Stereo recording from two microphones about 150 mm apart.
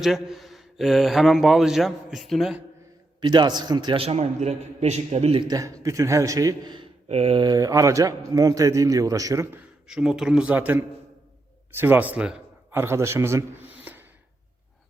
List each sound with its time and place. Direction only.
0.0 s speech: centre (ahead or behind)
3.2 s a man's voice: 30° right (ahead or behind)
5.5 s a man's voice: 20° right (ahead or behind)
7.1 s a man's voice: 40° right (ahead or behind); by 9.6 s 20° right (ahead or behind)
9.8 s a man's voice: 5° right (ahead or behind)
13.9 s a sound: 10° right (ahead or behind)